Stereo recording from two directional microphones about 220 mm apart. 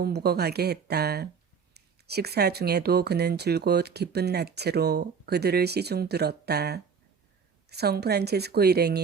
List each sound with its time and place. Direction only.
0.0 s speech: 45° right (ahead or behind)